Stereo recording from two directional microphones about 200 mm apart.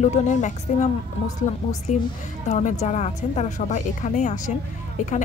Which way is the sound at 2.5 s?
35° left (ahead or behind).